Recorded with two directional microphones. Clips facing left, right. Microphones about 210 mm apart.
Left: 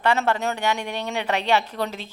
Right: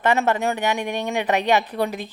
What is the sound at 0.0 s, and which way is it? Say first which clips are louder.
A woman's voice: right 2 dB; 20° right (ahead or behind).